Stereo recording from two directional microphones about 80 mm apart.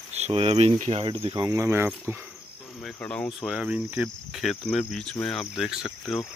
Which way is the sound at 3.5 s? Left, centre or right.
Centre.